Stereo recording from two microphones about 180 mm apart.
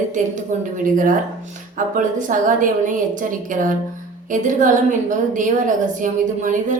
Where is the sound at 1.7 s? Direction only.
45° right (ahead or behind).